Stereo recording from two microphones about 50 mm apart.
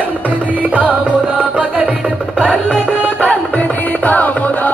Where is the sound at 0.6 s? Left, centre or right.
Right.